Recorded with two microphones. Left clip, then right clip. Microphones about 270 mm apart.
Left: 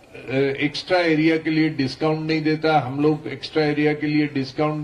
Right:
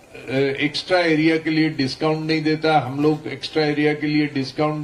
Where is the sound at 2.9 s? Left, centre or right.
Left.